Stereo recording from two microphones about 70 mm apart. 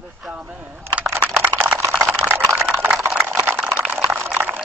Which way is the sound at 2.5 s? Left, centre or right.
Right.